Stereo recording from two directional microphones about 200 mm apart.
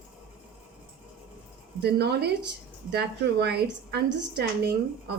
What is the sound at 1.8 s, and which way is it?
A woman's voice, 55° right (ahead or behind).